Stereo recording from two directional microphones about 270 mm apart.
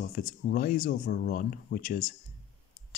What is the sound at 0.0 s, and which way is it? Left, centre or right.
Speech, left.